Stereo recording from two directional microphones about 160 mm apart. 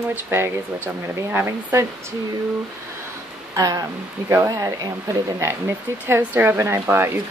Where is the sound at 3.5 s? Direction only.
20° right (ahead or behind).